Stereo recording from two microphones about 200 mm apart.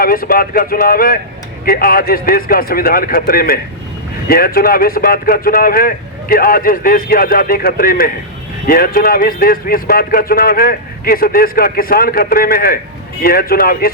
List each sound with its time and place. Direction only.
0.0 s speech: 45° left (ahead or behind)